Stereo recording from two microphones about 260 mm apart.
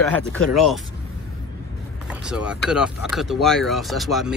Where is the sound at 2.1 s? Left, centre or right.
Centre.